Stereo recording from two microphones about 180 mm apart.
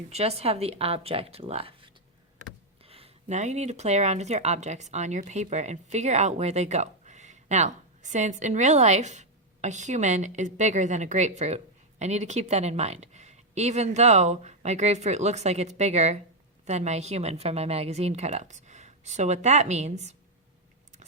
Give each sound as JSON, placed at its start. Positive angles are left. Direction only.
{"t": 0.1, "sound": "speech", "side_deg": -35}